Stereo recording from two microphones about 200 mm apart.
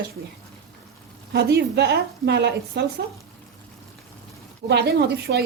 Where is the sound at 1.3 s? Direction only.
55° right (ahead or behind).